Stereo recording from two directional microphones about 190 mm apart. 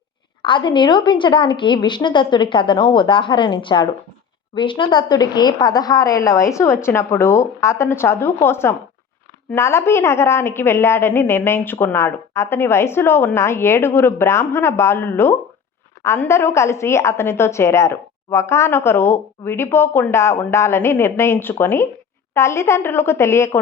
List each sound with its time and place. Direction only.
0.4 s a woman's voice: 25° left (ahead or behind)